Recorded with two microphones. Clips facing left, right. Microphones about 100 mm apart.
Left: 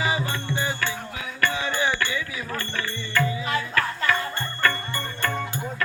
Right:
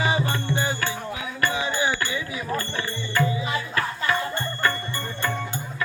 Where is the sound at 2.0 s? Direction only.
25° right (ahead or behind).